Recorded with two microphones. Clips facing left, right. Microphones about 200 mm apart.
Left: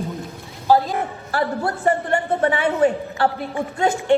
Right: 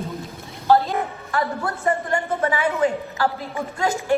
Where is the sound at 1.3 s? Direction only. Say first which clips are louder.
Left 3 dB; 35° left (ahead or behind).